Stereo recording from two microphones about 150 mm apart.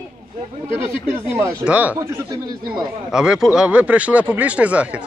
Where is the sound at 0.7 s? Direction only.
15° right (ahead or behind).